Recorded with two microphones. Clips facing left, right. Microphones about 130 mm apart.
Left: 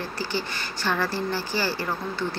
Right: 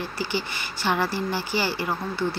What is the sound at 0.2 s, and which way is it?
A woman's voice, 15° right (ahead or behind).